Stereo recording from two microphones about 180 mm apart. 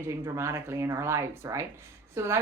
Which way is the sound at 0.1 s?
15° right (ahead or behind).